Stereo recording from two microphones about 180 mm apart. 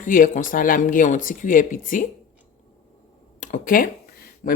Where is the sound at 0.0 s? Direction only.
45° left (ahead or behind).